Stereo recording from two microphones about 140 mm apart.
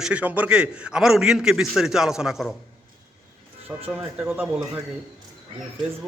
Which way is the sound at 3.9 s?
10° right (ahead or behind).